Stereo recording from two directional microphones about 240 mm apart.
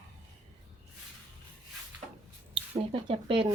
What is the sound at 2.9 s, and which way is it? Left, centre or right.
Speech, right.